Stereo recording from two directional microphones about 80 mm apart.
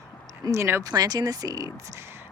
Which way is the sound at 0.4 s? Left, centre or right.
Right.